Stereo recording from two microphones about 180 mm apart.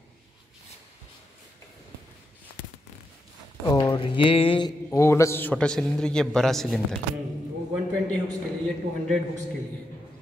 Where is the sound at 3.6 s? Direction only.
20° left (ahead or behind).